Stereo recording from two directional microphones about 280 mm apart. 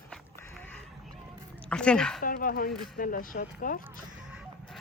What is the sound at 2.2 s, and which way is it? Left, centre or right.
Speech, left.